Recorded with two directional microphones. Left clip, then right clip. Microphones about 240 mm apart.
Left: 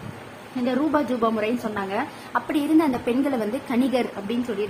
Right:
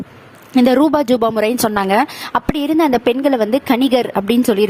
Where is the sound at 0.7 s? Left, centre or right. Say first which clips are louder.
Right 9 dB; right.